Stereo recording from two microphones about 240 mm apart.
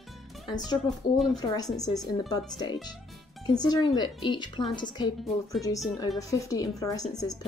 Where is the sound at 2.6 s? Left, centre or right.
Centre.